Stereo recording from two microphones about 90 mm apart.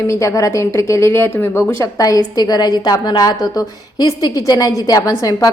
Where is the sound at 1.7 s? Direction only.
40° left (ahead or behind).